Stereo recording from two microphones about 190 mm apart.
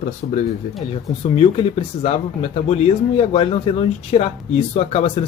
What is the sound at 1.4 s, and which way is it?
Speech, 30° left (ahead or behind).